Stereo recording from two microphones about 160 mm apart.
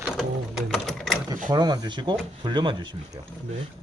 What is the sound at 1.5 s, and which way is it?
Speech, 25° right (ahead or behind).